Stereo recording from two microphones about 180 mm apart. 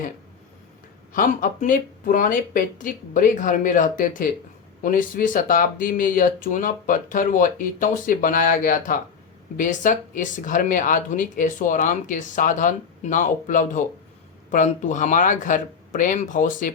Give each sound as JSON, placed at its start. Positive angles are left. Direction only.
{"t": 1.1, "sound": "speech", "side_deg": 50}